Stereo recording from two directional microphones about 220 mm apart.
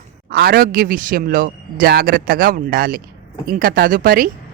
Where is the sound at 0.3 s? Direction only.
45° right (ahead or behind).